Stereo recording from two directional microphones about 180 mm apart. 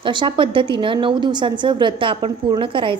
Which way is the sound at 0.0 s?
25° right (ahead or behind).